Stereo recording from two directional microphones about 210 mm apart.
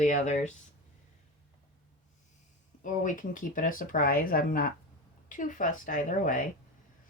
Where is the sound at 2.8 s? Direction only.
40° left (ahead or behind).